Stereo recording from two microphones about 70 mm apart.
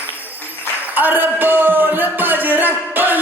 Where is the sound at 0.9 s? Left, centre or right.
Right.